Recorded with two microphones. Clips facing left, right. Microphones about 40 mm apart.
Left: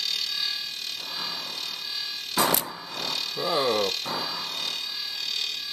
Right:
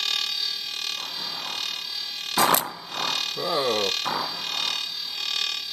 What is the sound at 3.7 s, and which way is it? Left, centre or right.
Speech, right.